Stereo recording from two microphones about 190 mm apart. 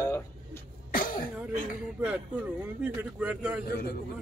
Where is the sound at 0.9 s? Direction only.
45° left (ahead or behind).